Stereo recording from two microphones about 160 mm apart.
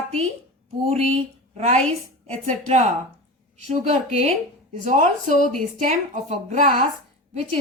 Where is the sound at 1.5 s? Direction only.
45° right (ahead or behind).